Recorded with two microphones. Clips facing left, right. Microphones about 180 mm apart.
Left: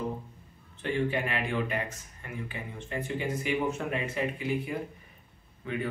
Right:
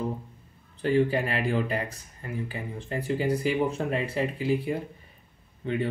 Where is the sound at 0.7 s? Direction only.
35° right (ahead or behind).